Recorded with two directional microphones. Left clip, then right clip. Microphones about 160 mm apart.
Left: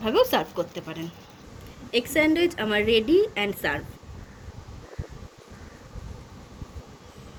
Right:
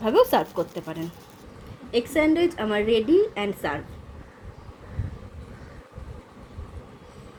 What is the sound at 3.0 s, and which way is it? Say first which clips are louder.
Speech: right 1 dB; 20° left (ahead or behind).